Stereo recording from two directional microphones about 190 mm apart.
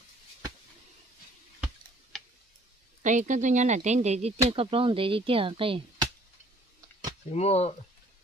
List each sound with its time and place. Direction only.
3.0 s a woman's voice: 40° right (ahead or behind)
7.2 s speech: 35° left (ahead or behind)